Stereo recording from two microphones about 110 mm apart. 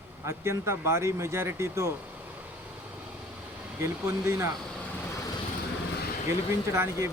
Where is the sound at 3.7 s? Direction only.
25° right (ahead or behind).